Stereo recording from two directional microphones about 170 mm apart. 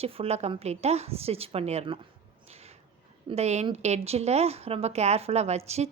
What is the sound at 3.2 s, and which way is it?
A woman's voice, 40° right (ahead or behind).